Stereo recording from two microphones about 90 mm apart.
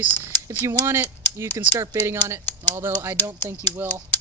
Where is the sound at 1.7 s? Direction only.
40° right (ahead or behind).